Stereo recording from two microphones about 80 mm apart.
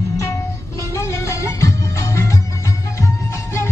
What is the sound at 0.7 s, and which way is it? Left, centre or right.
Music, left.